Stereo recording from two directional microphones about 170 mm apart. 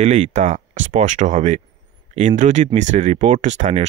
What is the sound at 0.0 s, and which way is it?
Speech, 40° right (ahead or behind).